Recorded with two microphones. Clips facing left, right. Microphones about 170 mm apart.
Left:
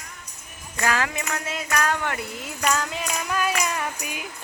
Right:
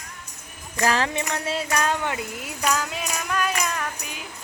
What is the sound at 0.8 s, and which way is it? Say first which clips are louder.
Speech: right 2 dB; 30° right (ahead or behind).